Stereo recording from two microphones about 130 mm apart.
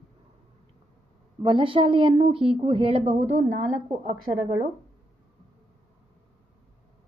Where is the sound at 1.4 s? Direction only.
40° right (ahead or behind); by 4.1 s 65° right (ahead or behind).